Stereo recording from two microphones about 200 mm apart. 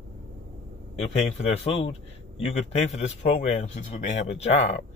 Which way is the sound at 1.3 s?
30° left (ahead or behind).